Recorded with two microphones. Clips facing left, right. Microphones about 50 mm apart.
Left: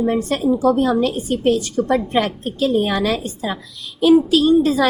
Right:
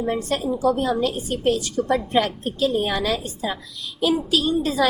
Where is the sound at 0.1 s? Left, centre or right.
Left.